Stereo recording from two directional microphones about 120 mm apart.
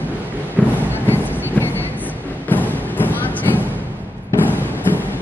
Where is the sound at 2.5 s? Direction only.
15° left (ahead or behind).